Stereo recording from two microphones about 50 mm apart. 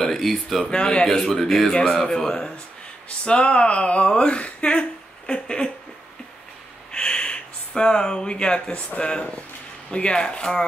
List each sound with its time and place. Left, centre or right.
0.0 s speech: centre
0.7 s speech: centre
6.9 s a sound: centre
8.9 s speech: centre